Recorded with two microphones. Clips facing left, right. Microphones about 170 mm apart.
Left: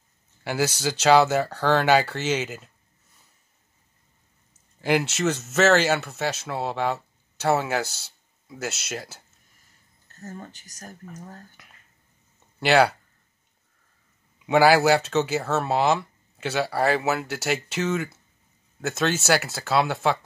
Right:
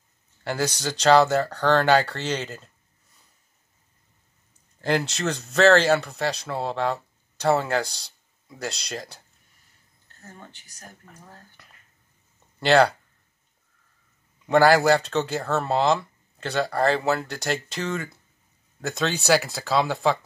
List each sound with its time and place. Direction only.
0.4 s speech: 5° left (ahead or behind)
4.8 s speech: 10° left (ahead or behind)
10.2 s speech: 40° left (ahead or behind)
12.5 s speech: 5° left (ahead or behind)
14.4 s speech: 5° left (ahead or behind)